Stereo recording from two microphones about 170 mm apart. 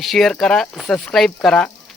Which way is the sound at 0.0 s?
Centre (ahead or behind).